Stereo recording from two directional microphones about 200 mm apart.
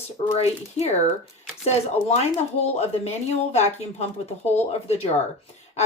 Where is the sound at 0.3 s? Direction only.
30° left (ahead or behind).